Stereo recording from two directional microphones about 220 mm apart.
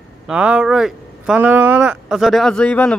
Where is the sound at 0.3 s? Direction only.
5° right (ahead or behind).